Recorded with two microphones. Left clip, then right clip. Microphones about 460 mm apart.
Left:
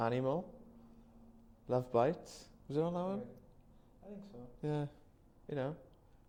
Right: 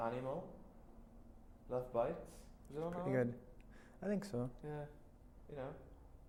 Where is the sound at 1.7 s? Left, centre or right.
Left.